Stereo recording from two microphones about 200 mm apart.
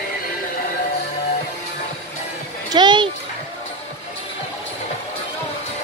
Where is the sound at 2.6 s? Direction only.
20° right (ahead or behind).